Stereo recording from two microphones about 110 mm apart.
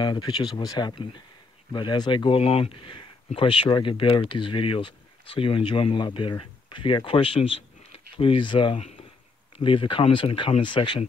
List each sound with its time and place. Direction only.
0.0 s speech: 40° left (ahead or behind)